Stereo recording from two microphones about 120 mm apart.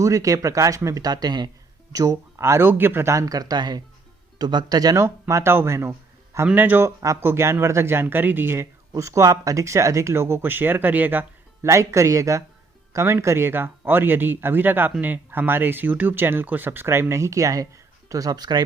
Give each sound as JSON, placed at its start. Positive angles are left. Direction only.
{"t": 0.0, "sound": "speech", "side_deg": -25}
{"t": 5.0, "sound": "speech", "side_deg": -20}